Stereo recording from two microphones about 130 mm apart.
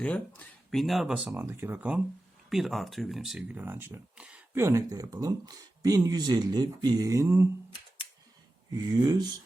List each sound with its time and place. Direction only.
0.0 s speech: 10° left (ahead or behind); by 1.3 s 5° right (ahead or behind)
1.3 s speech: 15° right (ahead or behind)
2.5 s speech: centre (ahead or behind)
3.6 s speech: 15° right (ahead or behind)
8.7 s speech: 30° right (ahead or behind)